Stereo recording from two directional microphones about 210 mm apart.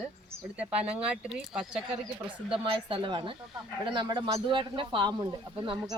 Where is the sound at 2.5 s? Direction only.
25° right (ahead or behind).